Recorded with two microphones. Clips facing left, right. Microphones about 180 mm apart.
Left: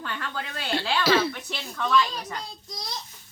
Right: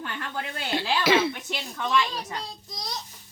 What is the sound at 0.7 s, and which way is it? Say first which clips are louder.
Speech: even; 20° right (ahead or behind).